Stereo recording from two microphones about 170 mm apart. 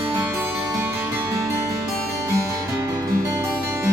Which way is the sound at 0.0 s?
10° right (ahead or behind).